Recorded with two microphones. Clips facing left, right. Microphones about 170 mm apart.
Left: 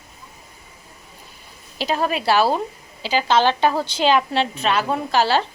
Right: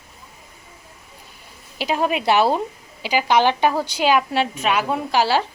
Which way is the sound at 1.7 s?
10° right (ahead or behind).